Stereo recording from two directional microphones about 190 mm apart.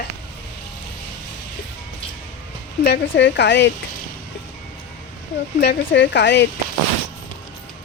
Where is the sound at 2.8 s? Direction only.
65° left (ahead or behind).